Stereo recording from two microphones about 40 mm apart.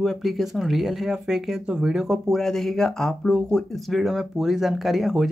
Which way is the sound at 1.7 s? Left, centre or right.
Centre.